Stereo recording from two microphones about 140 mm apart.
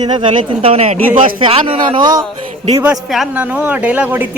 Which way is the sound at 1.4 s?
40° right (ahead or behind).